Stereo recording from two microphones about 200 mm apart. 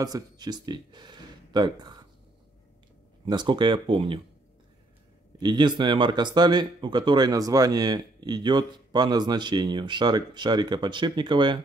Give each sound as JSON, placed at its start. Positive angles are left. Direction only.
{"t": 0.0, "sound": "speech", "side_deg": -20}
{"t": 3.3, "sound": "speech", "side_deg": -20}
{"t": 5.4, "sound": "speech", "side_deg": -20}